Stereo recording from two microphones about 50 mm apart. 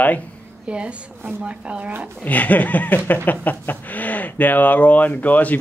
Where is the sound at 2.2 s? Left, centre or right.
Left.